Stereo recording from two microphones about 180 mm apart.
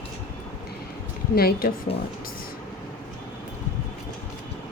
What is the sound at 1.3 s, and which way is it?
Speech, 60° left (ahead or behind).